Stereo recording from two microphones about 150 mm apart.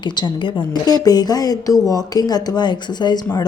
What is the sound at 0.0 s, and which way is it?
A woman's voice, 30° left (ahead or behind).